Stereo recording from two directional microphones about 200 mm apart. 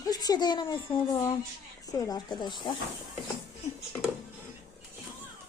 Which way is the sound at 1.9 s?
20° left (ahead or behind).